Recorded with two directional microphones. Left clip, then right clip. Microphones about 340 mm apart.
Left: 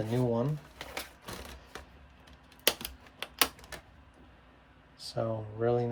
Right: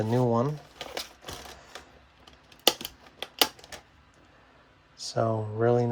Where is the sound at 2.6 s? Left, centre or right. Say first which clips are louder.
Right 5 dB; centre.